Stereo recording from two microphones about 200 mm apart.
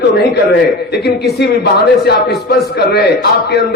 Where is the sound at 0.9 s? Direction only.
55° left (ahead or behind).